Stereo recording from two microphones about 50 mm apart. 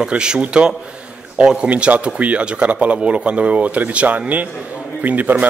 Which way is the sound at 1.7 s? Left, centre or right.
Right.